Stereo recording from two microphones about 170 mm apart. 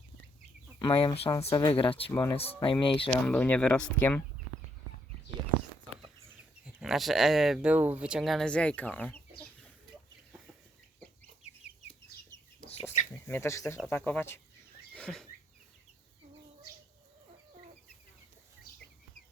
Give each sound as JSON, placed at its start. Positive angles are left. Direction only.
{"t": 0.8, "sound": "speech", "side_deg": 30}
{"t": 1.5, "sound": "speech", "side_deg": 20}
{"t": 1.7, "sound": "speech", "side_deg": 30}
{"t": 2.0, "sound": "speech", "side_deg": 10}
{"t": 2.8, "sound": "speech", "side_deg": 30}
{"t": 3.1, "sound": "speech", "side_deg": 10}
{"t": 6.7, "sound": "speech", "side_deg": 0}
{"t": 11.4, "sound": "chicken", "side_deg": 40}
{"t": 13.2, "sound": "speech", "side_deg": 15}
{"t": 14.9, "sound": "a sound", "side_deg": 5}